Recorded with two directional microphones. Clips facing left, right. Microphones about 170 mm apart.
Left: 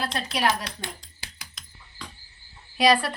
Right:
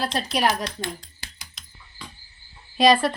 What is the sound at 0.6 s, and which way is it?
Speech, 10° left (ahead or behind).